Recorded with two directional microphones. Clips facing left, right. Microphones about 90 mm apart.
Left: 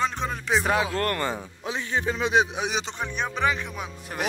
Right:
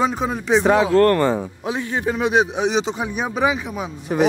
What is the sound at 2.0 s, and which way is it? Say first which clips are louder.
Speech: right 5 dB; 15° right (ahead or behind).